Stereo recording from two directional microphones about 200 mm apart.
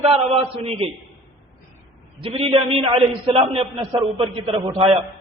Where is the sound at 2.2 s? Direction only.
25° right (ahead or behind).